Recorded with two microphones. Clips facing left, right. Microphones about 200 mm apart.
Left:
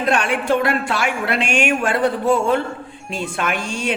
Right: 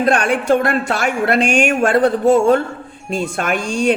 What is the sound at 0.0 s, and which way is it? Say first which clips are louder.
A woman's voice: right 4 dB; 45° right (ahead or behind).